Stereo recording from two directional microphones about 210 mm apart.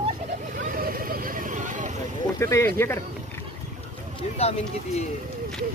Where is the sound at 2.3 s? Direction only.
15° left (ahead or behind).